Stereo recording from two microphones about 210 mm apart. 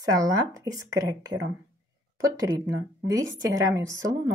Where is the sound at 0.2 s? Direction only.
15° right (ahead or behind).